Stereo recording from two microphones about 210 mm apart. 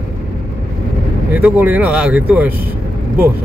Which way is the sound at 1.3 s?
10° right (ahead or behind).